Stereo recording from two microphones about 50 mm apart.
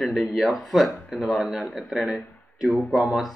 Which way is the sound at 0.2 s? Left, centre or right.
Centre.